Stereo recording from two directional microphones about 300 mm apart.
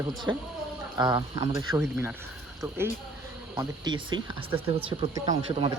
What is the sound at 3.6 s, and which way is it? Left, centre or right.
Speech, centre.